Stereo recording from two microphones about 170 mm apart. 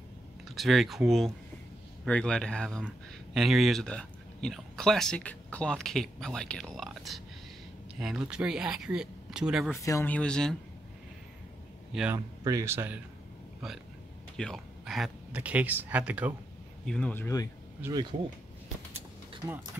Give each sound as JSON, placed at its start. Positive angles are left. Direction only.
{"t": 0.5, "sound": "speech", "side_deg": 0}
{"t": 9.8, "sound": "speech", "side_deg": 20}
{"t": 11.9, "sound": "speech", "side_deg": -5}
{"t": 12.4, "sound": "speech", "side_deg": -15}
{"t": 14.3, "sound": "speech", "side_deg": 0}
{"t": 16.8, "sound": "speech", "side_deg": 5}
{"t": 19.4, "sound": "speech", "side_deg": -20}